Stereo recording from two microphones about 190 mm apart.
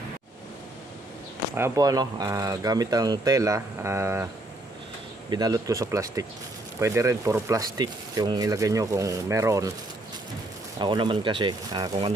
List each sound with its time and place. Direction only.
1.5 s speech: 15° right (ahead or behind)
5.3 s speech: 20° right (ahead or behind)
10.8 s speech: 25° right (ahead or behind)